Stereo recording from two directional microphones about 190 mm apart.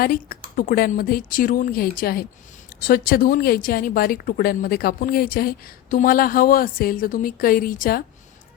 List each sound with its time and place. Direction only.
0.0 s speech: 50° left (ahead or behind)